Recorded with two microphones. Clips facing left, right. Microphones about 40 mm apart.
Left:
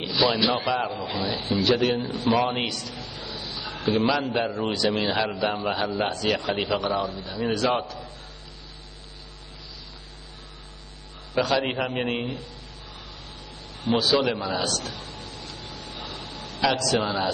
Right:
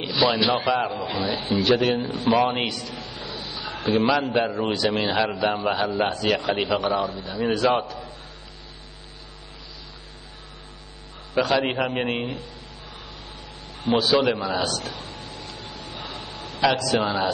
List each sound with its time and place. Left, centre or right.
0.0 s a man's voice: centre
11.3 s a man's voice: centre
13.7 s a sound: centre